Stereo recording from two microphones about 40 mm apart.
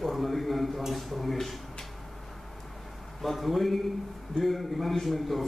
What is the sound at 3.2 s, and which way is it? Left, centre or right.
A man's voice, centre.